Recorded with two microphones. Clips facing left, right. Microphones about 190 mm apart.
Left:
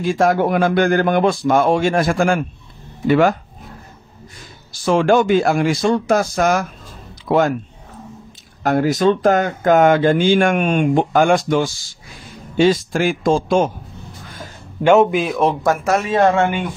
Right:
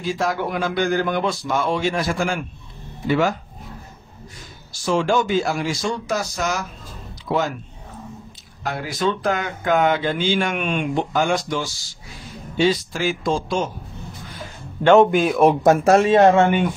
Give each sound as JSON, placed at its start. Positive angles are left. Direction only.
{"t": 0.0, "sound": "speech", "side_deg": 50}
{"t": 4.8, "sound": "speech", "side_deg": 60}
{"t": 8.6, "sound": "speech", "side_deg": 45}
{"t": 14.8, "sound": "a man's voice", "side_deg": 5}
{"t": 15.6, "sound": "speech", "side_deg": -25}